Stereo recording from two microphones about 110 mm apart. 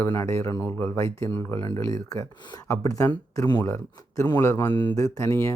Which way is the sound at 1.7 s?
30° left (ahead or behind).